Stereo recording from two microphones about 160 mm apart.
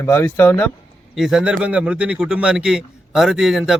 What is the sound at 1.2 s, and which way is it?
A man's voice, 5° right (ahead or behind).